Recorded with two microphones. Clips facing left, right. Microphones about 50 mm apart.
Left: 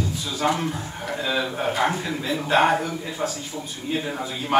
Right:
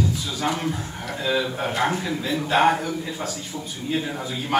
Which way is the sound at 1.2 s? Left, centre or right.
Centre.